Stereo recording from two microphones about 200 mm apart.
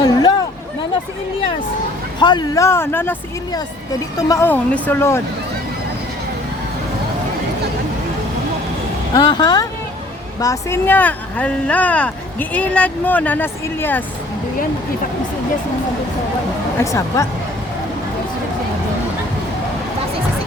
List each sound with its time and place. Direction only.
0.0 s a sound: 20° left (ahead or behind)
2.1 s speech: 20° left (ahead or behind)
9.1 s speech: 20° left (ahead or behind)
16.7 s speech: 15° left (ahead or behind)